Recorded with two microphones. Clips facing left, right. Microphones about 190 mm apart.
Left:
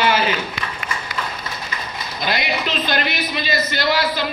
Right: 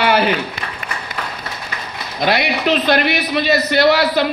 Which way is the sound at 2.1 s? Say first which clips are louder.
Right 6 dB; 60° right (ahead or behind).